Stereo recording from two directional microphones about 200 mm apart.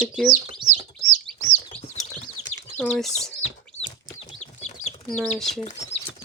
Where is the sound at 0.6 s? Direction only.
20° right (ahead or behind).